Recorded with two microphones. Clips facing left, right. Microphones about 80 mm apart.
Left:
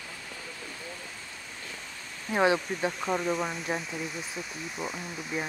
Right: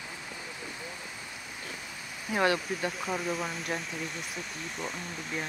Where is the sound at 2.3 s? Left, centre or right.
Centre.